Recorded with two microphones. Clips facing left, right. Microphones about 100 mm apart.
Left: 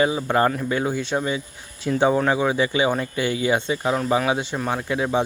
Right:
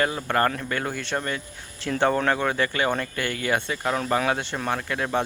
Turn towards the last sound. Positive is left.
turn(degrees=10)  # may be behind; listen again after turning